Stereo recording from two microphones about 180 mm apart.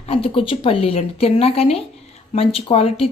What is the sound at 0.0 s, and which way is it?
Speech, 30° left (ahead or behind).